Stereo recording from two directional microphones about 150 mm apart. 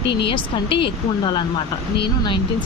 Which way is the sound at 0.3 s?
35° left (ahead or behind).